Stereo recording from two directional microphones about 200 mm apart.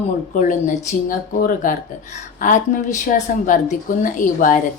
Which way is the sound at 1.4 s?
45° left (ahead or behind).